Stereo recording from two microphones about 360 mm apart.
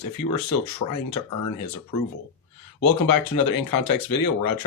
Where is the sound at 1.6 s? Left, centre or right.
Left.